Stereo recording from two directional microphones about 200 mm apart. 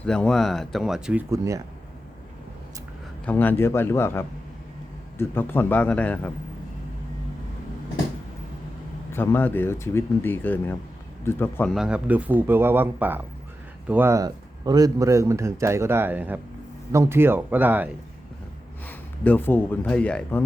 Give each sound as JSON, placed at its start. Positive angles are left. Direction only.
{"t": 0.0, "sound": "speech", "side_deg": 5}
{"t": 1.3, "sound": "speech", "side_deg": -15}
{"t": 3.2, "sound": "speech", "side_deg": 10}
{"t": 9.1, "sound": "speech", "side_deg": 10}
{"t": 18.9, "sound": "speech", "side_deg": 10}